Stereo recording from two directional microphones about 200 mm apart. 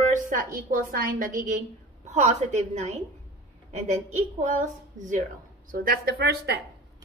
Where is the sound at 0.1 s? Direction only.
40° right (ahead or behind).